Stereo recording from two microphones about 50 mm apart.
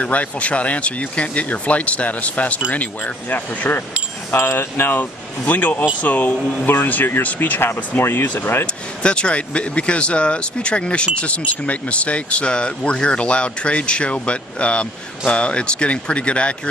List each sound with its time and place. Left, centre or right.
0.0 s speech: left
4.6 s speech: left
5.4 s speech: left
9.0 s speech: left